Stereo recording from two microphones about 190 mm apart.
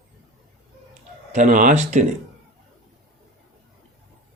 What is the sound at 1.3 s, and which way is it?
Speech, 40° right (ahead or behind).